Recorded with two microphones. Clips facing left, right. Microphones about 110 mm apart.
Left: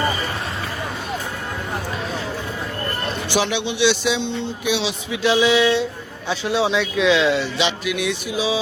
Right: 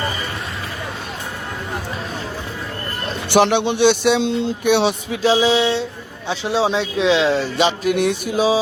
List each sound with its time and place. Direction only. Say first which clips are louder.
3.2 s speech: right 8 dB; 60° right (ahead or behind)
5.2 s speech: right 1 dB; 35° right (ahead or behind)